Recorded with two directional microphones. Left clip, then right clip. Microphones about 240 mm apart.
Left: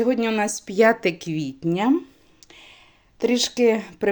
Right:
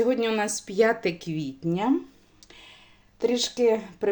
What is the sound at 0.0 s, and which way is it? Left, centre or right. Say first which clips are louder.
Speech: left 2 dB; left.